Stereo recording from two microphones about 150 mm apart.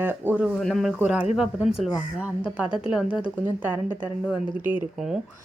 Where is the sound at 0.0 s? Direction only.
10° right (ahead or behind).